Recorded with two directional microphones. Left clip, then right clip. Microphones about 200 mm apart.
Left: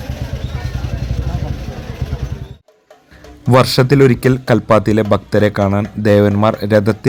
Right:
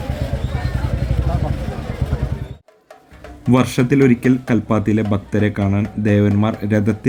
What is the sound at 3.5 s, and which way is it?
A man's voice, 30° left (ahead or behind).